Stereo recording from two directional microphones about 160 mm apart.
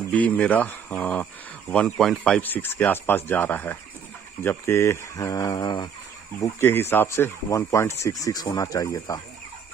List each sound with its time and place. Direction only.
0.1 s speech: 10° left (ahead or behind)